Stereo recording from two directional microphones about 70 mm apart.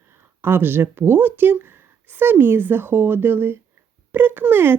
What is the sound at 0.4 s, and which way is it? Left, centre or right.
A woman's voice, right.